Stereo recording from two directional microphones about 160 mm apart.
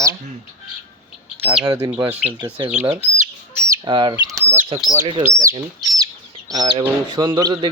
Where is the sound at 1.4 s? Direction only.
10° right (ahead or behind).